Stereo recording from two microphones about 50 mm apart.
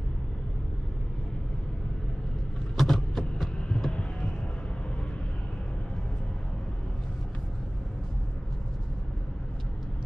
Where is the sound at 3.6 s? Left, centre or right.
Left.